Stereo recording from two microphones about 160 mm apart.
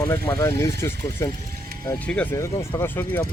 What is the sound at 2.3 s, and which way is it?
Speech, 15° left (ahead or behind).